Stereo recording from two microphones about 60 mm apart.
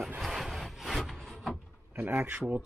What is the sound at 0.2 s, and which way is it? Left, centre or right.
Wood, centre.